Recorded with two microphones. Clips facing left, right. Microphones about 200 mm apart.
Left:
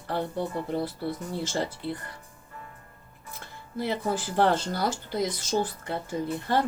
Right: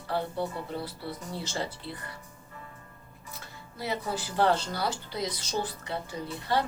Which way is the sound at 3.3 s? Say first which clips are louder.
Left 9 dB; 50° left (ahead or behind).